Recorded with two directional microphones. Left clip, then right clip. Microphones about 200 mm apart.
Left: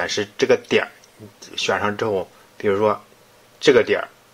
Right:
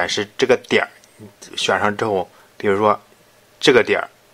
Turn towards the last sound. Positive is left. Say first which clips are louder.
# right 1 dB
turn(degrees=-20)  # may be behind; listen again after turning